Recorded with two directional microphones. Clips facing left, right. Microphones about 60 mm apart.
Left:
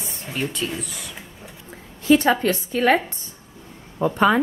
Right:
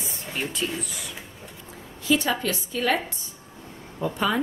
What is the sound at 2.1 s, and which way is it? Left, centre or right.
Speech, left.